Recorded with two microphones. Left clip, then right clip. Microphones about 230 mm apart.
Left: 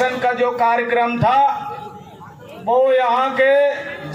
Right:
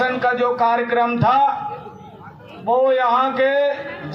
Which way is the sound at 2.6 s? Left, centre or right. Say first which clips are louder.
Left 1 dB; right.